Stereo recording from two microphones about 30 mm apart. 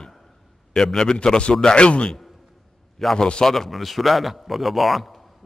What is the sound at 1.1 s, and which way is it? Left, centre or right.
Speech, left.